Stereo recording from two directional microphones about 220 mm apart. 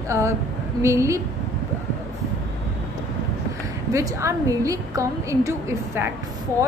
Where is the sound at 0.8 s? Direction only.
15° right (ahead or behind).